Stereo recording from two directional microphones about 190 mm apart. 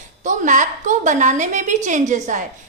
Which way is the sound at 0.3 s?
40° right (ahead or behind).